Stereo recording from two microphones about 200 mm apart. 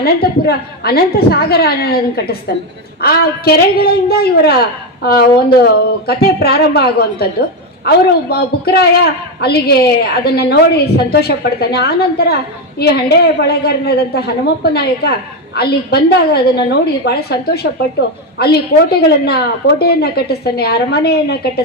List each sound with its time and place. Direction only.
0.0 s a man's voice: 50° left (ahead or behind)